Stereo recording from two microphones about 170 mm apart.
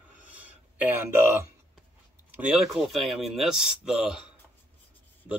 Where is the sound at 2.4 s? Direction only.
Centre (ahead or behind).